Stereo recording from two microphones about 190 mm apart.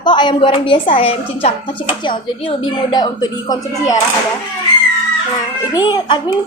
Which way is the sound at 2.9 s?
20° left (ahead or behind).